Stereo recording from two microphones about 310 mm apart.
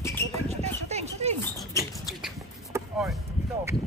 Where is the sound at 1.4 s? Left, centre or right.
Centre.